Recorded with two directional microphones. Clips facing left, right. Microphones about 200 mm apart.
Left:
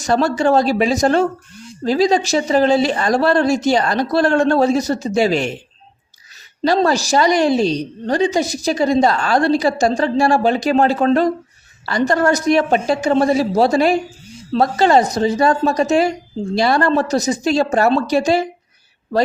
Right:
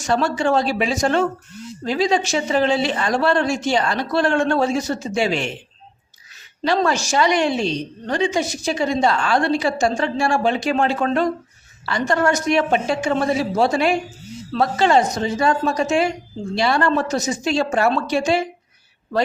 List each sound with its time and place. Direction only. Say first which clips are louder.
0.0 s a woman's voice: left 4 dB; 40° left (ahead or behind)
6.7 s a woman's voice: left 4 dB; 35° left (ahead or behind)